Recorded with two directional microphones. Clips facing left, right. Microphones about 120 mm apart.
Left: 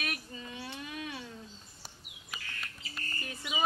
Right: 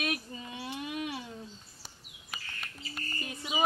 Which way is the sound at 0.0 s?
20° right (ahead or behind).